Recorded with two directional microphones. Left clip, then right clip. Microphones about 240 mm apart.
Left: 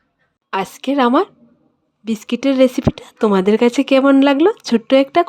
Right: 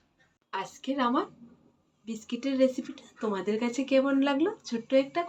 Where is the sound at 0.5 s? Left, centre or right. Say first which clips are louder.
Left 14 dB; left.